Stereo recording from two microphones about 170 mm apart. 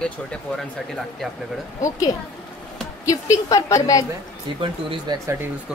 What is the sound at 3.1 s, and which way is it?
Speech, 20° left (ahead or behind).